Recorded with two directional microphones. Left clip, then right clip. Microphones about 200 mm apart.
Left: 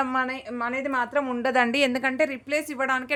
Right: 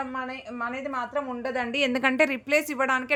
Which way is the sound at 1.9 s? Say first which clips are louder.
Right 2 dB; 10° right (ahead or behind).